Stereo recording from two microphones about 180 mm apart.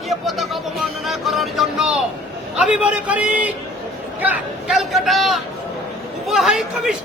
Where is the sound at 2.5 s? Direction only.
5° right (ahead or behind).